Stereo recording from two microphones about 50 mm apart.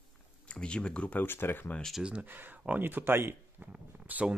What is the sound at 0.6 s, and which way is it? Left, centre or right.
Speech, centre.